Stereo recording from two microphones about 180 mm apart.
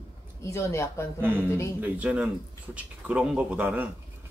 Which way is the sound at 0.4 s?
15° left (ahead or behind).